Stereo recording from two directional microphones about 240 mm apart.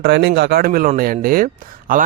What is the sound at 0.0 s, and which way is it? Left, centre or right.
Speech, right.